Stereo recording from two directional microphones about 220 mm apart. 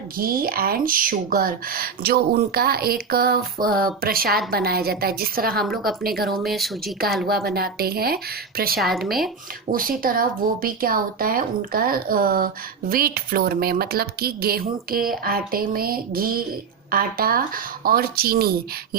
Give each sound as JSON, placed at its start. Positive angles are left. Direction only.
{"t": 0.2, "sound": "speech", "side_deg": -40}
{"t": 5.6, "sound": "speech", "side_deg": 0}
{"t": 6.0, "sound": "speech", "side_deg": -45}
{"t": 6.3, "sound": "speech", "side_deg": 0}
{"t": 7.3, "sound": "speech", "side_deg": -45}
{"t": 8.8, "sound": "speech", "side_deg": 0}
{"t": 9.7, "sound": "speech", "side_deg": -40}